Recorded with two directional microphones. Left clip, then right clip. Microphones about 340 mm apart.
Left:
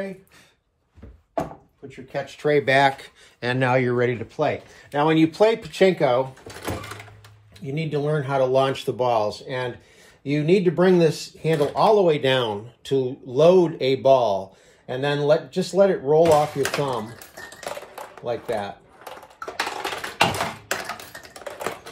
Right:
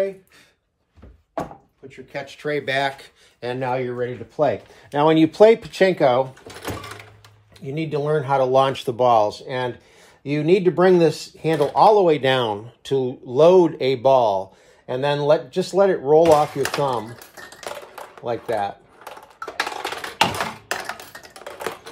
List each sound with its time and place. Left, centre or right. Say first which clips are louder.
1.9 s speech: left 2 dB; centre; by 4.1 s left
4.4 s speech: right 4 dB; centre
4.9 s speech: right 3 dB; right
7.6 s speech: right 2 dB; centre
17.6 s a sound: even; centre
18.2 s speech: right 3 dB; right
19.4 s a sound: right 1 dB; centre